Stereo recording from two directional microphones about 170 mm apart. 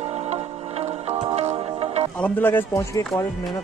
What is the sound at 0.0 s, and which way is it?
Music, 40° right (ahead or behind).